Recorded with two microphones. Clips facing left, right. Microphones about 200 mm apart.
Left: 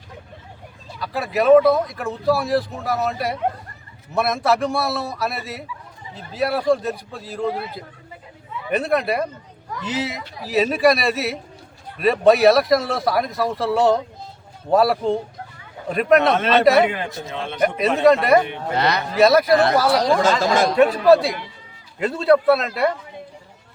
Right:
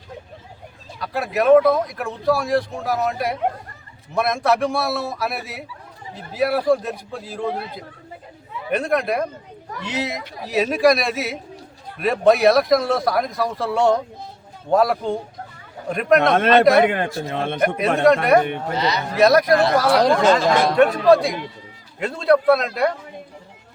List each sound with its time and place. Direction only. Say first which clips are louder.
0.9 s speech: even; centre (ahead or behind)
16.3 s a man's voice: right 1 dB; 55° right (ahead or behind)
18.1 s speech: even; centre (ahead or behind)
18.8 s speech: left 3 dB; 60° left (ahead or behind)
19.1 s speech: even; centre (ahead or behind)
19.9 s speech: right 2 dB; 55° right (ahead or behind)
20.7 s speech: left 1 dB; 5° left (ahead or behind)